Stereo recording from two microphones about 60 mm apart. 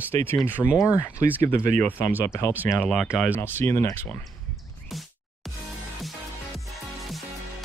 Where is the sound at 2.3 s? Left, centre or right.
Left.